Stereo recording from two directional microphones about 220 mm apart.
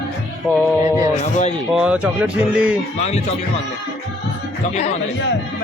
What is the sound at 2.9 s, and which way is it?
Speech, 30° left (ahead or behind).